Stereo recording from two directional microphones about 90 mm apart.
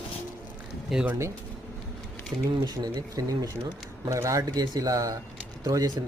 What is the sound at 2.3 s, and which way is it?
Speech, 40° right (ahead or behind).